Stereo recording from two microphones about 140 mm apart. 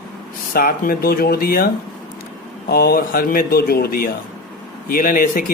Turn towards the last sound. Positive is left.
turn(degrees=85)